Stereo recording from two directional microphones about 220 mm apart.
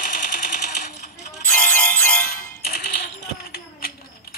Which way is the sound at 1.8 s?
5° left (ahead or behind).